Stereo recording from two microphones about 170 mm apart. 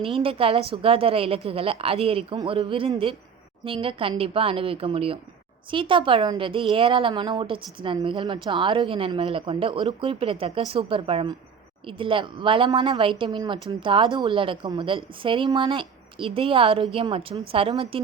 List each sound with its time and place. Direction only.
0.0 s a woman's voice: 30° right (ahead or behind)